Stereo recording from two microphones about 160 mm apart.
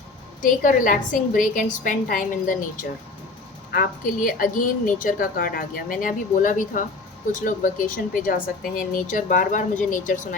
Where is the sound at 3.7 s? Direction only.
65° left (ahead or behind).